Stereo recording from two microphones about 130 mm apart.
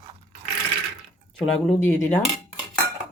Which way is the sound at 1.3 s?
10° left (ahead or behind).